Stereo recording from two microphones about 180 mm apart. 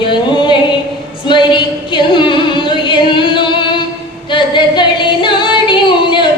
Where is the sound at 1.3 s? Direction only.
25° left (ahead or behind).